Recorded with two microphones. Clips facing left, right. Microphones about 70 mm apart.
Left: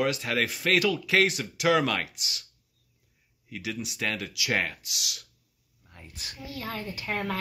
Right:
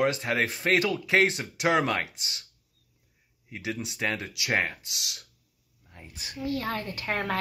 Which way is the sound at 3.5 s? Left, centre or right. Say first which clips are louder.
Right 1 dB; right.